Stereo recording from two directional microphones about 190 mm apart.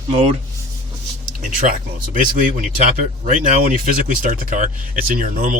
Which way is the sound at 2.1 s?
45° right (ahead or behind).